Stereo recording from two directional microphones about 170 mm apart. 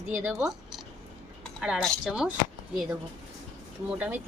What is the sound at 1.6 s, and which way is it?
Speech, centre (ahead or behind).